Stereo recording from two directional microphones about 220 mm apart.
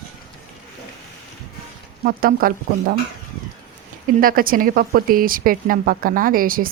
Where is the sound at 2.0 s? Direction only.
40° right (ahead or behind).